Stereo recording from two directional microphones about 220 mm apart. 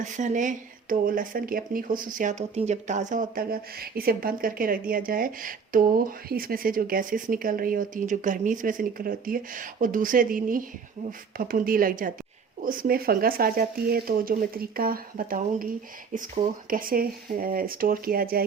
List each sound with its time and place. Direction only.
0.0 s speech: 35° right (ahead or behind)